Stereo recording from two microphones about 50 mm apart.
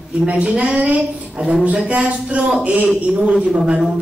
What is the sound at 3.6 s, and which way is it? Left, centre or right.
Speech, centre.